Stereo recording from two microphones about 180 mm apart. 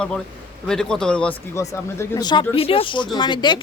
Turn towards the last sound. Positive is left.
turn(degrees=25)  # may be behind; listen again after turning